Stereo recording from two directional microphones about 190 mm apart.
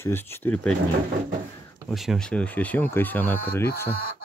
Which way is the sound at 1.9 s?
Centre (ahead or behind).